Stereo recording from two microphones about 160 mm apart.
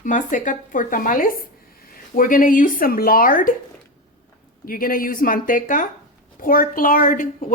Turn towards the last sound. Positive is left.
turn(degrees=60)  # may be behind; listen again after turning